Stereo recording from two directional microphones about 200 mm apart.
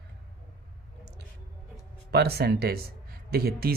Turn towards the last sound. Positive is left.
turn(degrees=-50)  # may be behind; listen again after turning